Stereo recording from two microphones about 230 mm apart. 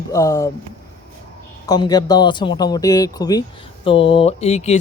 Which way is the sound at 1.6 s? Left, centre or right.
Centre.